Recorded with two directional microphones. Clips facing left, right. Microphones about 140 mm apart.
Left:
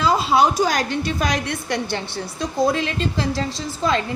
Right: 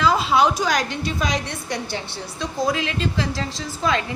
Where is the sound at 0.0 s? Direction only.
40° left (ahead or behind); by 2.0 s 60° left (ahead or behind).